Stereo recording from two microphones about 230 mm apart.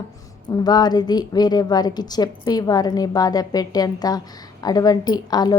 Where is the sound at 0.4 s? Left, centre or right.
Centre.